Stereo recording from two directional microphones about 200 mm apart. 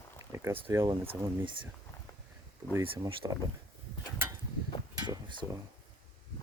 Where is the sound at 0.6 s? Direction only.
15° right (ahead or behind).